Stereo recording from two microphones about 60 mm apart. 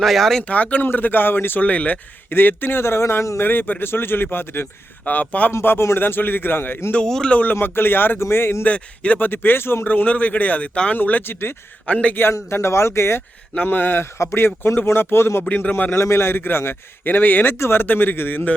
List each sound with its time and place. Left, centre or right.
0.0 s speech: centre
0.4 s a man's voice: left
3.5 s a man's voice: left
5.5 s a man's voice: left
6.9 s speech: centre
7.5 s a man's voice: left
8.6 s a man's voice: left
9.8 s a man's voice: left
11.9 s a man's voice: left
12.3 s speech: left
13.7 s a man's voice: left
15.4 s a man's voice: left
15.7 s a man's voice: left